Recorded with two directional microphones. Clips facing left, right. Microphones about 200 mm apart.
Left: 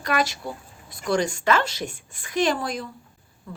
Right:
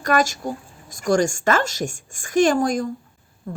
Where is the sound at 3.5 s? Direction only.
50° right (ahead or behind).